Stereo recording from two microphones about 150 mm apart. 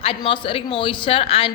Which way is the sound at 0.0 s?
35° left (ahead or behind).